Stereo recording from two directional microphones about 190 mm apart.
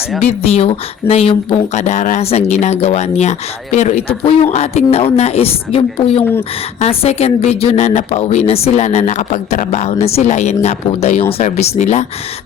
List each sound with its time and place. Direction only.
0.2 s speech: 30° left (ahead or behind)